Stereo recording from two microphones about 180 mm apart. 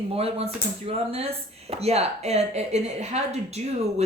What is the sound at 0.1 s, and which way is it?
Speech, 35° right (ahead or behind).